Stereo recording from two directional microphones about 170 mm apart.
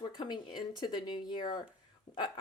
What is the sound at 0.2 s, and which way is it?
Speech, 25° left (ahead or behind).